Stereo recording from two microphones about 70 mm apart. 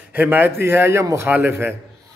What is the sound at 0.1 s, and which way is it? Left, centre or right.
A man's voice, right.